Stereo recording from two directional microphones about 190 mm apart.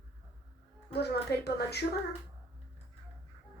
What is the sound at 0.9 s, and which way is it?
Speech, 55° left (ahead or behind).